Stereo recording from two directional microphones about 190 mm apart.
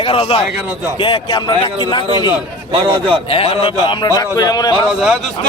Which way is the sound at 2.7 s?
25° right (ahead or behind).